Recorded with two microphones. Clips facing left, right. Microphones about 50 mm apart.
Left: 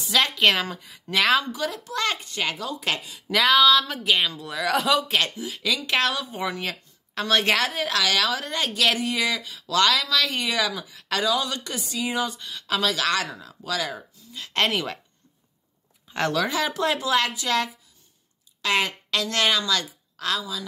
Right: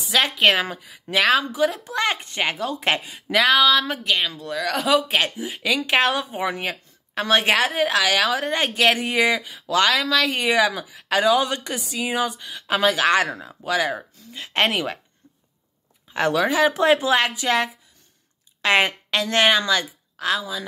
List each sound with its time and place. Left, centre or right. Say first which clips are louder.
0.0 s speech: right 2 dB; centre
1.6 s a woman's voice: right 5 dB; right
3.3 s speech: right 1 dB; centre
5.4 s a woman's voice: right 4 dB; right
11.2 s a woman's voice: right 6 dB; right
16.1 s speech: right 4 dB; centre
16.3 s a woman's voice: right 8 dB; right